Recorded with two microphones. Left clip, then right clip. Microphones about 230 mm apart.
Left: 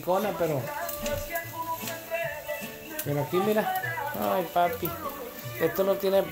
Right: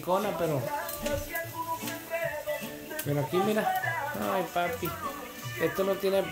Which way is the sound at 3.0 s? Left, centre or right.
Centre.